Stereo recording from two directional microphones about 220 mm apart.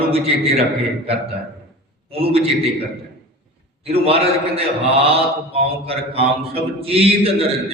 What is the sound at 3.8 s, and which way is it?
Mantra, 25° right (ahead or behind).